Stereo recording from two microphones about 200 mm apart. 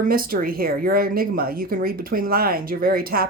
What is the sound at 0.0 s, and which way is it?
Speech, 45° right (ahead or behind).